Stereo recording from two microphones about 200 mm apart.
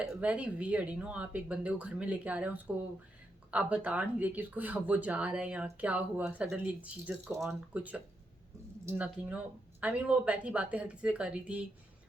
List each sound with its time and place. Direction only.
0.0 s speech: 5° right (ahead or behind)